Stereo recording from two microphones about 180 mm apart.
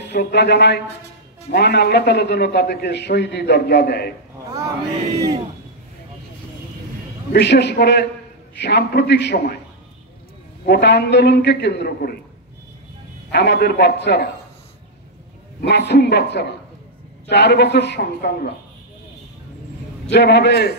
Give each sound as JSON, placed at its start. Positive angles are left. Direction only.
{"t": 0.1, "sound": "a man's voice", "side_deg": 70}
{"t": 7.3, "sound": "a man's voice", "side_deg": 70}
{"t": 10.6, "sound": "a man's voice", "side_deg": 65}
{"t": 13.3, "sound": "a man's voice", "side_deg": 65}
{"t": 15.6, "sound": "a man's voice", "side_deg": 70}
{"t": 20.1, "sound": "a man's voice", "side_deg": 70}